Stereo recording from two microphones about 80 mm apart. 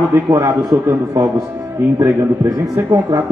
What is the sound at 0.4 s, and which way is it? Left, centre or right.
Speech, right.